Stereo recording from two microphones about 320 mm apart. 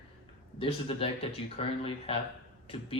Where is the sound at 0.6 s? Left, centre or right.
Centre.